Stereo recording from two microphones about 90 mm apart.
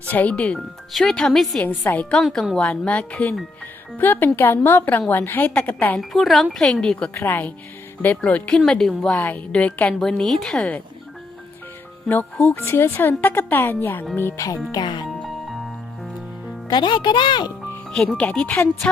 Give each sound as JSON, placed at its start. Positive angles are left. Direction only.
{"t": 0.0, "sound": "speech", "side_deg": 15}
{"t": 1.6, "sound": "a woman's voice", "side_deg": 20}
{"t": 6.0, "sound": "speech", "side_deg": 0}
{"t": 7.1, "sound": "a woman's voice", "side_deg": 25}
{"t": 9.1, "sound": "speech", "side_deg": 20}
{"t": 10.0, "sound": "speech", "side_deg": 5}
{"t": 12.0, "sound": "a woman's voice", "side_deg": 20}
{"t": 12.5, "sound": "a woman's voice", "side_deg": 30}
{"t": 14.7, "sound": "speech", "side_deg": 55}
{"t": 15.2, "sound": "music", "side_deg": 0}
{"t": 16.6, "sound": "speech", "side_deg": 60}
{"t": 17.9, "sound": "speech", "side_deg": 5}